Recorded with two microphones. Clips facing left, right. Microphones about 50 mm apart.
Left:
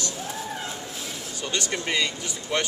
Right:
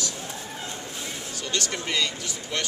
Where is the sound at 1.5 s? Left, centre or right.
Centre.